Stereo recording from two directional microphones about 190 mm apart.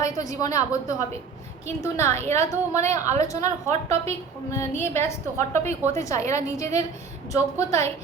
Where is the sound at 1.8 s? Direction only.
15° left (ahead or behind).